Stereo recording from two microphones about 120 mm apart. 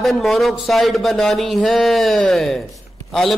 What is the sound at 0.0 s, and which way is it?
A man's voice, centre (ahead or behind).